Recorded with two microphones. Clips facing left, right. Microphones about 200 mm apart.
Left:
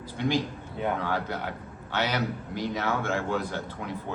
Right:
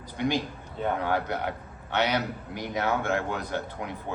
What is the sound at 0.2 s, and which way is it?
A man's voice, 15° right (ahead or behind).